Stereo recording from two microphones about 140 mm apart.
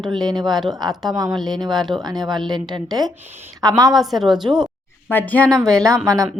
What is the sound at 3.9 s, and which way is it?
Speech, centre (ahead or behind).